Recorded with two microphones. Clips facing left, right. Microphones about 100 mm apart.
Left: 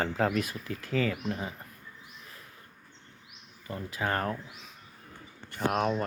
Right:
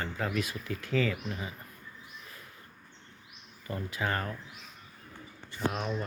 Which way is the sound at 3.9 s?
45° left (ahead or behind).